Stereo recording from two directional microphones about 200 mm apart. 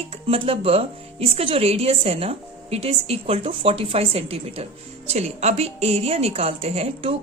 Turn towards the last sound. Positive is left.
turn(degrees=-30)  # may be behind; listen again after turning